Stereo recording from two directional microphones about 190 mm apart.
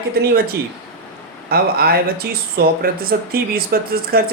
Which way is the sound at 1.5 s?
55° right (ahead or behind).